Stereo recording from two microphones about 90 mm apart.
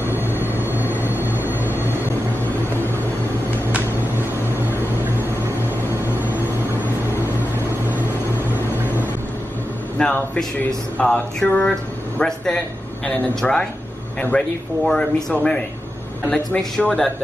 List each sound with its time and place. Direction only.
0.7 s vehicle: 25° right (ahead or behind)
1.3 s a sound: 25° left (ahead or behind)
9.9 s a man's voice: 10° left (ahead or behind)